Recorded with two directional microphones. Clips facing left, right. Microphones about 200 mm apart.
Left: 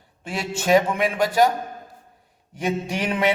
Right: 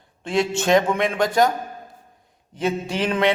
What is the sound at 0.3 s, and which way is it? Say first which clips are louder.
A man's voice: right 2 dB; 10° left (ahead or behind).